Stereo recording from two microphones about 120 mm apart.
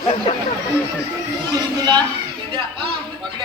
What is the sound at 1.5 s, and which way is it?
Speech, 35° right (ahead or behind).